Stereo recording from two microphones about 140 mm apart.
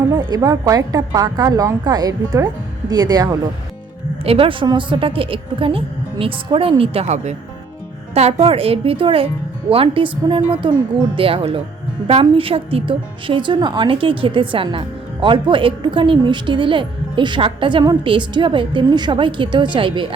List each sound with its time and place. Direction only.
0.1 s a woman's voice: 25° right (ahead or behind)
4.2 s a woman's voice: 40° right (ahead or behind)